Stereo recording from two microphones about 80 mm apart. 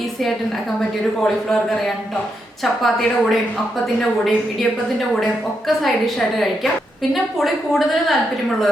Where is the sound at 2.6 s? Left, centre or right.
Centre.